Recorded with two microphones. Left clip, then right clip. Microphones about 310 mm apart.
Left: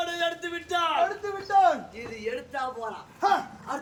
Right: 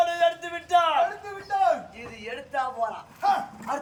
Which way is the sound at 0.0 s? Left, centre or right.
Centre.